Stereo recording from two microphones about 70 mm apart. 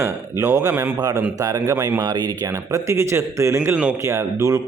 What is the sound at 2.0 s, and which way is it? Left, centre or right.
Speech, right.